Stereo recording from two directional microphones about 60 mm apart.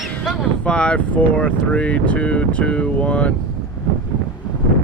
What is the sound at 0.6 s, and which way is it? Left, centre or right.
Speech, centre.